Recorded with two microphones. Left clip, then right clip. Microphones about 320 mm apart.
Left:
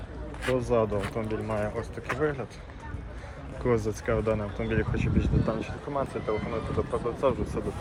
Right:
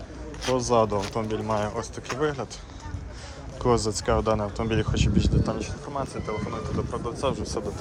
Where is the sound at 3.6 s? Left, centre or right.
Centre.